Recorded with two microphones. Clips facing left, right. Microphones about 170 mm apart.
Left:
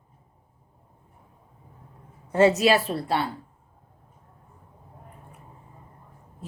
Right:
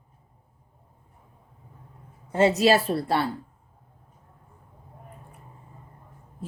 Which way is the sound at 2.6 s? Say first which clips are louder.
Right 1 dB; 35° right (ahead or behind).